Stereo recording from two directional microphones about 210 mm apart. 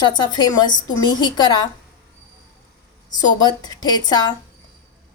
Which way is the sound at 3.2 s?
20° left (ahead or behind).